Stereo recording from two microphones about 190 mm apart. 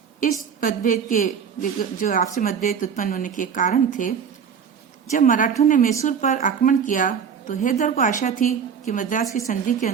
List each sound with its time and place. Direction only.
0.2 s a woman's voice: 45° left (ahead or behind)
5.1 s a woman's voice: 45° left (ahead or behind)